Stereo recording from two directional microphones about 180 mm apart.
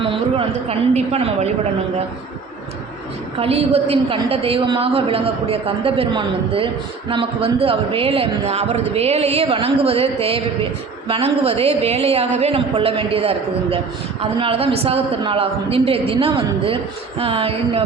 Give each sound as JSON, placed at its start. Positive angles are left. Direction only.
{"t": 0.0, "sound": "a woman's voice", "side_deg": -30}
{"t": 3.3, "sound": "a woman's voice", "side_deg": -35}